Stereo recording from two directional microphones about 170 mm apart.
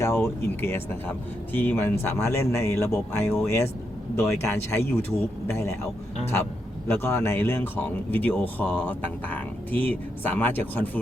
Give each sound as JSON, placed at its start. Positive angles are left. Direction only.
{"t": 0.0, "sound": "speech", "side_deg": 15}
{"t": 6.8, "sound": "speech", "side_deg": 15}